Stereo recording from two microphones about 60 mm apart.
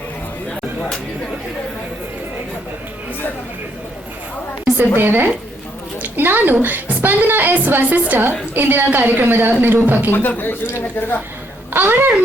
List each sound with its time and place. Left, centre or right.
4.9 s a woman's voice: right
10.1 s speech: left
11.7 s a child's voice: right